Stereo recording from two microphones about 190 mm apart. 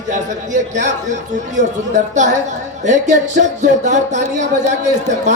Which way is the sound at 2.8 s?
40° right (ahead or behind).